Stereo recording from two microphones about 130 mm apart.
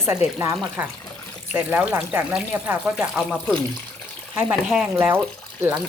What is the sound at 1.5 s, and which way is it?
Speech, 15° right (ahead or behind).